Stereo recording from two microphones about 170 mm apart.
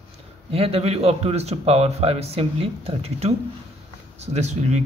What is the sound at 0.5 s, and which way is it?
Speech, 35° right (ahead or behind).